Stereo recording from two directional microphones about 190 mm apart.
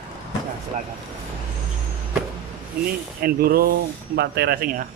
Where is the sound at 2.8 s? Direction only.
55° right (ahead or behind).